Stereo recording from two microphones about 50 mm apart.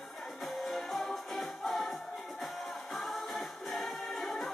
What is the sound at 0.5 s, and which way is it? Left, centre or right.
Music, centre.